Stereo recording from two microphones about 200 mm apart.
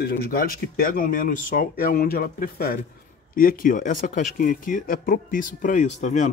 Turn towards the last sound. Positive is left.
turn(degrees=35)  # may be behind; listen again after turning